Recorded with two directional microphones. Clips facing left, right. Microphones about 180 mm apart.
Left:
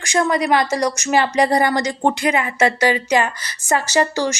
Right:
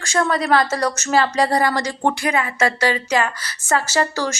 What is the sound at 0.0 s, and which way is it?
Speech, 15° left (ahead or behind).